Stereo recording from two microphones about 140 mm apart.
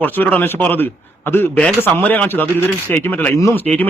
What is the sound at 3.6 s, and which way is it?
Speech, 10° left (ahead or behind).